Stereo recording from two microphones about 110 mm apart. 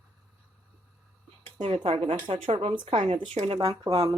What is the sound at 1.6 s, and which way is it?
Speech, 60° right (ahead or behind).